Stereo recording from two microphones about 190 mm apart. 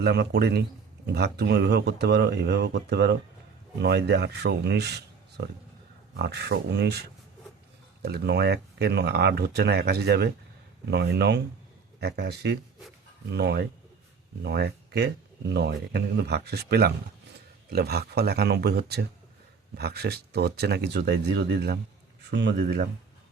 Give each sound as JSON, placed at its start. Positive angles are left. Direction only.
{"t": 0.0, "sound": "speech", "side_deg": -60}